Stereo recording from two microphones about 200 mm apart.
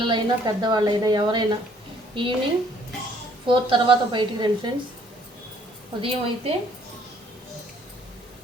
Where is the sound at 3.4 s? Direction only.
25° right (ahead or behind).